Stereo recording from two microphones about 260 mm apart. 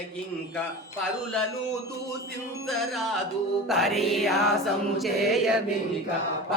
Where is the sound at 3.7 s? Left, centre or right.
Centre.